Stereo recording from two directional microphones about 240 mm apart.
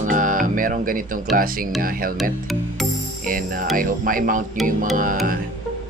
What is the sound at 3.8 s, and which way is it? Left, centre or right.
Speech, right.